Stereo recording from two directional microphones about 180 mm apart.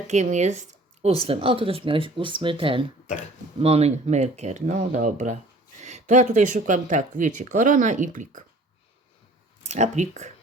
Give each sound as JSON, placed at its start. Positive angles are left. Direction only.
{"t": 0.1, "sound": "speech", "side_deg": -40}
{"t": 9.6, "sound": "speech", "side_deg": -40}